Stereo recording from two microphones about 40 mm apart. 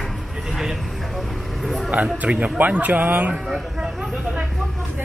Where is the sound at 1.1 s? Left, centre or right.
Centre.